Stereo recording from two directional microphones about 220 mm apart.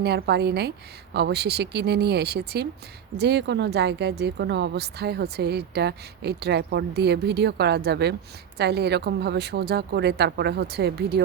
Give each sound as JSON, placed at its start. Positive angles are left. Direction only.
{"t": 0.0, "sound": "speech", "side_deg": -45}